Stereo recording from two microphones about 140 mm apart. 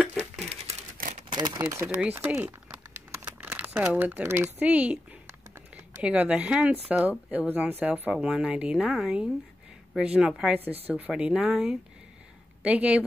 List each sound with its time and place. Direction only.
1.3 s speech: 30° right (ahead or behind); by 13.0 s 10° right (ahead or behind)